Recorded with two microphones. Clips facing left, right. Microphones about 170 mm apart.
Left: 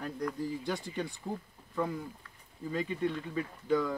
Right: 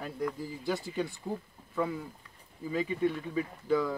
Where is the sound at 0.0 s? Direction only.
5° right (ahead or behind).